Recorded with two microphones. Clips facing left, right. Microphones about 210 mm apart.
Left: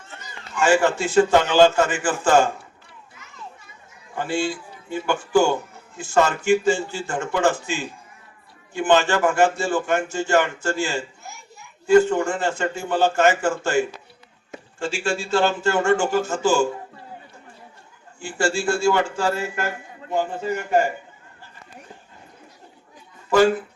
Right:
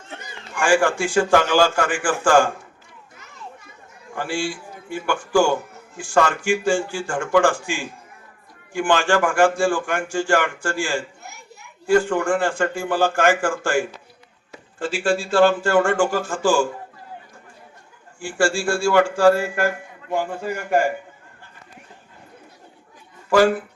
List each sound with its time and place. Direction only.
0.6 s a man's voice: 20° left (ahead or behind)
4.2 s a man's voice: 20° left (ahead or behind)
11.2 s a sound: 65° right (ahead or behind)
11.9 s a man's voice: 20° left (ahead or behind)
18.2 s a man's voice: 20° left (ahead or behind)